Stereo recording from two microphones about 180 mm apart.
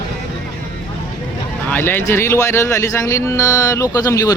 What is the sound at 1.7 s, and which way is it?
Speech, 10° left (ahead or behind).